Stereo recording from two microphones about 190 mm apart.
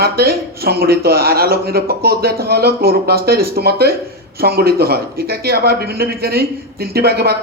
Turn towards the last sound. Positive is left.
turn(degrees=-55)  # may be behind; listen again after turning